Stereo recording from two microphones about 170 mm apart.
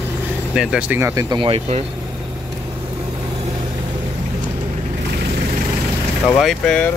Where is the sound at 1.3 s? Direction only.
30° right (ahead or behind).